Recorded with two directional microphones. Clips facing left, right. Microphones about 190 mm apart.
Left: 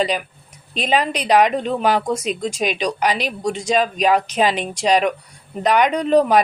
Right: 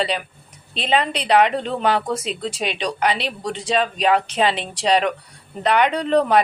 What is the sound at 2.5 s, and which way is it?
Speech, 30° right (ahead or behind).